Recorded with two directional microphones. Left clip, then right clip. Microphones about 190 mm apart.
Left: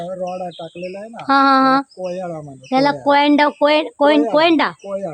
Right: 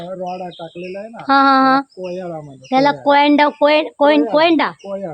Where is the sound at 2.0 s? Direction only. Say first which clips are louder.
Left 1 dB; 45° left (ahead or behind).